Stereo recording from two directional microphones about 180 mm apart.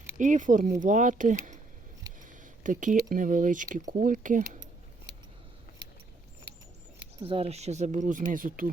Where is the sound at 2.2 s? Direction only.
45° right (ahead or behind).